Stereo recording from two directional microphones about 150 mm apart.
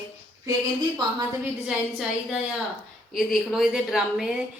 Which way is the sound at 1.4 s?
5° right (ahead or behind).